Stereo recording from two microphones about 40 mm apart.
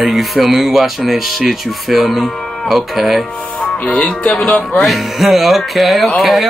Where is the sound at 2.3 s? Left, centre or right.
Centre.